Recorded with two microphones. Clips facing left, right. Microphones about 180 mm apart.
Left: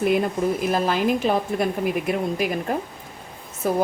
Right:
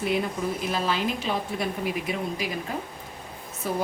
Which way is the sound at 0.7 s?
50° left (ahead or behind).